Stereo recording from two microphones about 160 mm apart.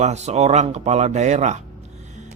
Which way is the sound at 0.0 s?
45° right (ahead or behind).